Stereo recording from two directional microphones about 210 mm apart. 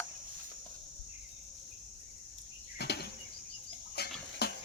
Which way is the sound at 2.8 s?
50° left (ahead or behind).